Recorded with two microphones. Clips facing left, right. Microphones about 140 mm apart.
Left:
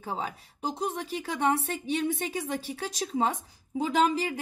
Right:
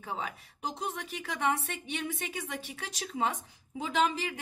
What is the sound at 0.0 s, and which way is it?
A woman's voice, 35° left (ahead or behind).